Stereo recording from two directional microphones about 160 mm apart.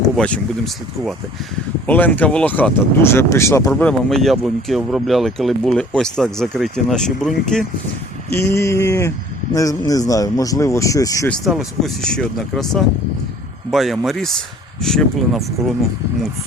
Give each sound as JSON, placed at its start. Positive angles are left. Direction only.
{"t": 0.2, "sound": "speech", "side_deg": 5}
{"t": 8.3, "sound": "speech", "side_deg": 15}
{"t": 11.3, "sound": "speech", "side_deg": 0}